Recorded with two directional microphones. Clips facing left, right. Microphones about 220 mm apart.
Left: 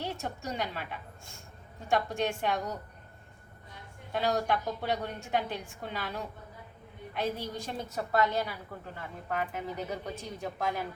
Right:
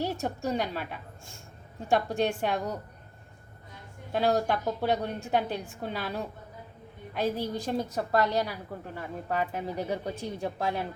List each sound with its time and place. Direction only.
0.0 s a woman's voice: 40° right (ahead or behind)
2.1 s a woman's voice: 35° right (ahead or behind)
4.1 s a woman's voice: 40° right (ahead or behind)